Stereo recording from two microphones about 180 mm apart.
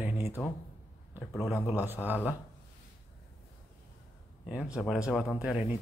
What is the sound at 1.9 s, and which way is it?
Speech, 10° right (ahead or behind).